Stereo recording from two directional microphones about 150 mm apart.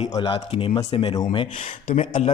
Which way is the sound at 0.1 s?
35° left (ahead or behind).